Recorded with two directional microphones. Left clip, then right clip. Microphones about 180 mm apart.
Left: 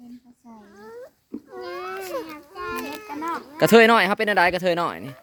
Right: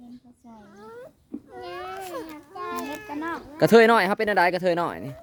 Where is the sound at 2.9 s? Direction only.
20° right (ahead or behind).